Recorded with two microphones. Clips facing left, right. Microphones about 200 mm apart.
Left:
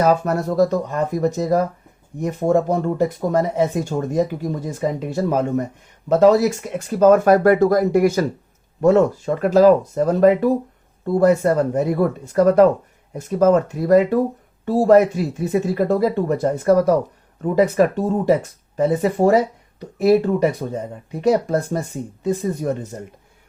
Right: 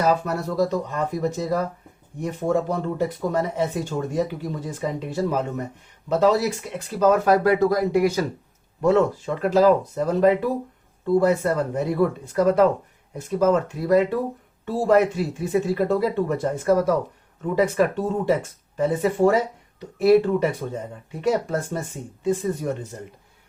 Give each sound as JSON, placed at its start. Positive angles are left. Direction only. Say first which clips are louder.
{"t": 0.0, "sound": "speech", "louder": "left 4 dB", "side_deg": 45}